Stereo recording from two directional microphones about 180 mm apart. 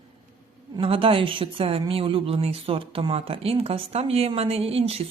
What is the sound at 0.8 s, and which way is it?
A woman's voice, 30° right (ahead or behind).